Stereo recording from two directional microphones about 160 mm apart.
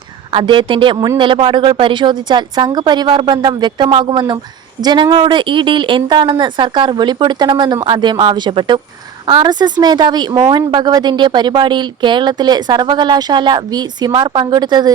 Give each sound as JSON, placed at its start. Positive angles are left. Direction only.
{"t": 0.3, "sound": "speech", "side_deg": -30}